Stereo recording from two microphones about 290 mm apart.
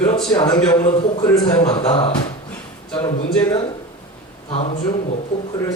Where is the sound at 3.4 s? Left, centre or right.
Centre.